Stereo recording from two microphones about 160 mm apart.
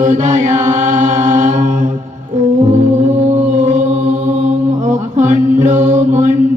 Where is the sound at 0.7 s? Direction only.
50° right (ahead or behind).